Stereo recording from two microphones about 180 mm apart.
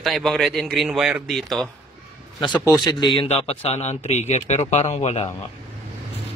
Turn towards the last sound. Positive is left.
turn(degrees=35)  # may be behind; listen again after turning